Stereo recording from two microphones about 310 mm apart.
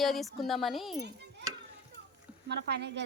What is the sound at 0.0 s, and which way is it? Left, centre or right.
Speech, centre.